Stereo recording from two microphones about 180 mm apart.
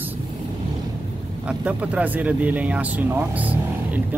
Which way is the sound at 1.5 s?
5° right (ahead or behind).